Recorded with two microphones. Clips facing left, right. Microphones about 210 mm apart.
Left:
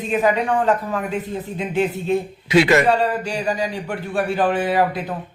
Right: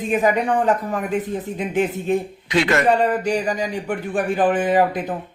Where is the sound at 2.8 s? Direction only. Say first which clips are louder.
Right 2 dB; 15° right (ahead or behind).